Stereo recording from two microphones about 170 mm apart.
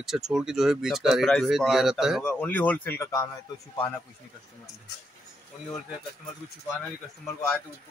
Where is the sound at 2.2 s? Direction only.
10° left (ahead or behind).